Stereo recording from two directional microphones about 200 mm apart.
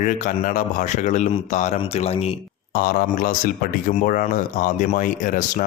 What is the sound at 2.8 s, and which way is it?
Speech, 45° left (ahead or behind).